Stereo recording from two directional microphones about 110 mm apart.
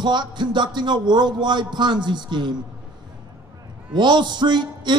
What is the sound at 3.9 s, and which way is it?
A man's voice, 45° right (ahead or behind).